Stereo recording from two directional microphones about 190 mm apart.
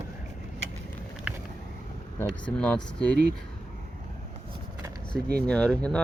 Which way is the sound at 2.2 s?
5° left (ahead or behind).